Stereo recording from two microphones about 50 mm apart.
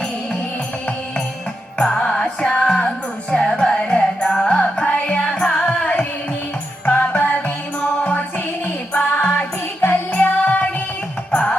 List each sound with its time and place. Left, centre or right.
2.0 s music: centre
5.0 s carnatic music: left
6.8 s music: left
8.6 s music: left